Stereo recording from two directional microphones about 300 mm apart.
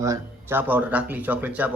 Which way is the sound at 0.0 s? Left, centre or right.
Centre.